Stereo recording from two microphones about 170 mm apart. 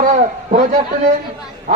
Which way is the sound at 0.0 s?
40° right (ahead or behind).